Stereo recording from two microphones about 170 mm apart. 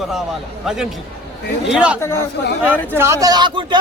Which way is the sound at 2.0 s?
15° left (ahead or behind).